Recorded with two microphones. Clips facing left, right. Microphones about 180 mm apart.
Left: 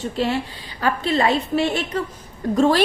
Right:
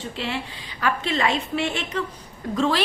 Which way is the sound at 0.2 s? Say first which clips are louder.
Left 8 dB; 40° left (ahead or behind).